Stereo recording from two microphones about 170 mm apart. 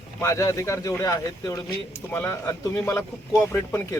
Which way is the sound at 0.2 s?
20° left (ahead or behind).